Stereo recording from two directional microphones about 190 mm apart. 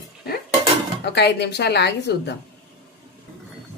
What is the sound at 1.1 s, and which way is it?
A woman's voice, 60° left (ahead or behind).